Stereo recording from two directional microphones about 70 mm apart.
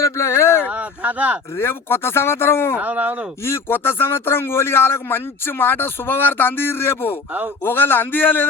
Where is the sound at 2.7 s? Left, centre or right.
Right.